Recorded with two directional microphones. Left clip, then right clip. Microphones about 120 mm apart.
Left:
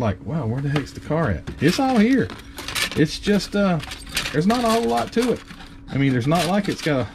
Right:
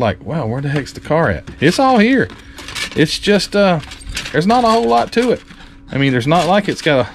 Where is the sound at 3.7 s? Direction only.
5° left (ahead or behind).